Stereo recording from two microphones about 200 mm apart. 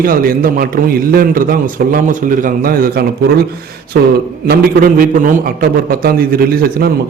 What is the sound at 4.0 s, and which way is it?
A man's voice, 50° right (ahead or behind).